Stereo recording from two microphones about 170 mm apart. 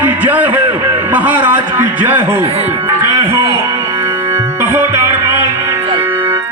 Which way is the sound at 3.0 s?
15° right (ahead or behind).